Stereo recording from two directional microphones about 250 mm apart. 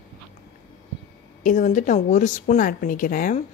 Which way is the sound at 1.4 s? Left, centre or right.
Left.